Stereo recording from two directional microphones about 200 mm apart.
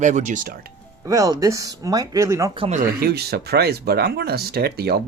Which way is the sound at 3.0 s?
55° right (ahead or behind).